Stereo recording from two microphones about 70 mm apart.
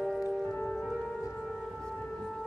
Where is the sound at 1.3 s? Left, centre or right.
Centre.